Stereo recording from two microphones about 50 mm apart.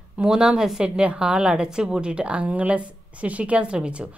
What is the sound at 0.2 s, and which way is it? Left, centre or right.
A woman's voice, centre.